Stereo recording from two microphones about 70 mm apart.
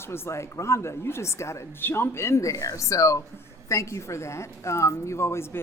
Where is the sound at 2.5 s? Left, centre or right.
Left.